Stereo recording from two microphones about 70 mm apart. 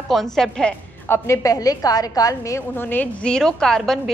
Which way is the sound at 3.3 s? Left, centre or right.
Centre.